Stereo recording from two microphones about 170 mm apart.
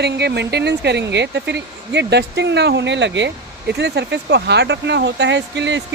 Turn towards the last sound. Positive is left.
turn(degrees=-90)